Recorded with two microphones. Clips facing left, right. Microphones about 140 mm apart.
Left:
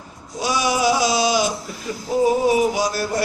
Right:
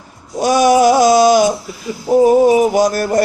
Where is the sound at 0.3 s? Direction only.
50° right (ahead or behind).